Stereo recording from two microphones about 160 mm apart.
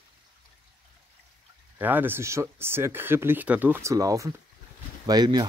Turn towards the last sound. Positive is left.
turn(degrees=-25)  # may be behind; listen again after turning